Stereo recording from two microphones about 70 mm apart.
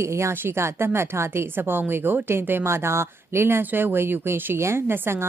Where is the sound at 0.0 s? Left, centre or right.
Right.